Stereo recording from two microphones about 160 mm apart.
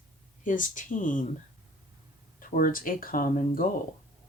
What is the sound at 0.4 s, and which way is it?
Speech, 55° left (ahead or behind).